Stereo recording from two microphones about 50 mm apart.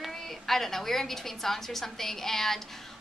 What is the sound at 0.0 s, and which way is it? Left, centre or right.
A woman's voice, centre.